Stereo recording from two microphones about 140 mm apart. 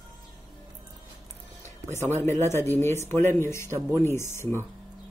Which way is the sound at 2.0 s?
20° left (ahead or behind).